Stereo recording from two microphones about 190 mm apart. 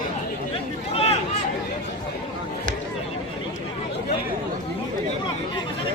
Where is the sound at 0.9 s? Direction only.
30° left (ahead or behind).